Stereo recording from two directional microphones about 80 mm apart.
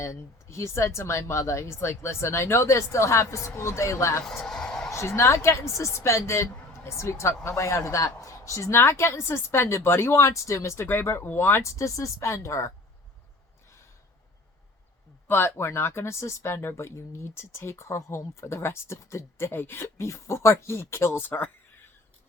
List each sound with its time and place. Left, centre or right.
0.0 s a woman's voice: left
4.3 s a sound: centre
4.9 s a woman's voice: left
15.3 s a woman's voice: left